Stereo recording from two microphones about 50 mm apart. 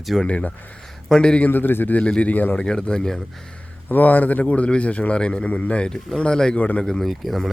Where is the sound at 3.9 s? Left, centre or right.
Left.